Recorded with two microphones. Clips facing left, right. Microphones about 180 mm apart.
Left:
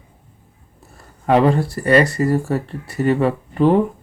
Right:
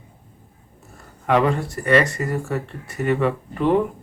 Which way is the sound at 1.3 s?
35° left (ahead or behind).